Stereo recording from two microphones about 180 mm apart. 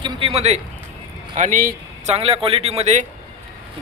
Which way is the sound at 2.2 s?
35° right (ahead or behind).